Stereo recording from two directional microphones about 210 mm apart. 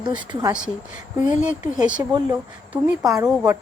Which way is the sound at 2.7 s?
15° right (ahead or behind).